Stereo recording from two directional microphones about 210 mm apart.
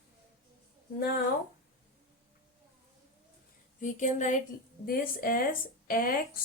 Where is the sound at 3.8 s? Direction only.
35° left (ahead or behind).